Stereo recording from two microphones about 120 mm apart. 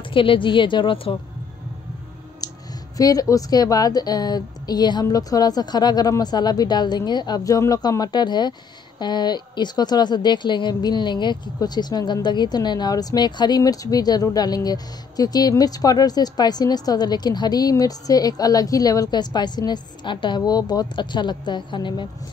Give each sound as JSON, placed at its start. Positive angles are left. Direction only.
{"t": 0.1, "sound": "a woman's voice", "side_deg": 45}
{"t": 2.4, "sound": "clicking", "side_deg": 30}
{"t": 3.0, "sound": "a woman's voice", "side_deg": 30}